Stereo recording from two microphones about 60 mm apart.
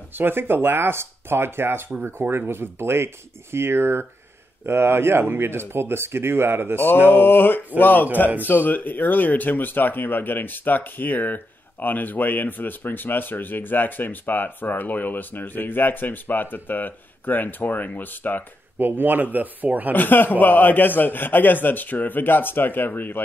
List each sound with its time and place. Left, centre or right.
0.1 s speech: right
7.1 s speech: left
18.8 s speech: right
19.9 s speech: left